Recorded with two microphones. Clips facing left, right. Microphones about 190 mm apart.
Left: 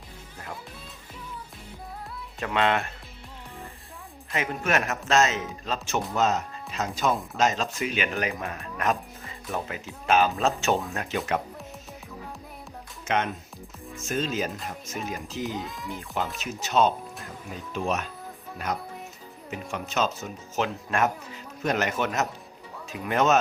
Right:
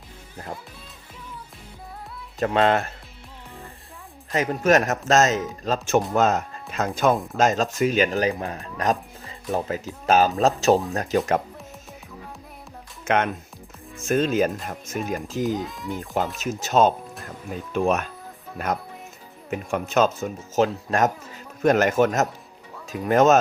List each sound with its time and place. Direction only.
2.4 s speech: 40° right (ahead or behind)
4.3 s speech: 40° right (ahead or behind)
13.1 s speech: 55° right (ahead or behind)
15.4 s speech: centre (ahead or behind)
16.4 s speech: 45° right (ahead or behind)
19.5 s speech: 50° right (ahead or behind)